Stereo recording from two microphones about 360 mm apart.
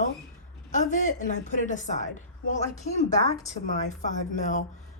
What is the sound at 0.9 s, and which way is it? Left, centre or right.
A woman's voice, left.